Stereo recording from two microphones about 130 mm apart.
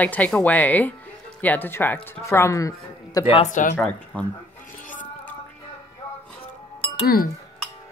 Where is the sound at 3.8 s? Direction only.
10° left (ahead or behind).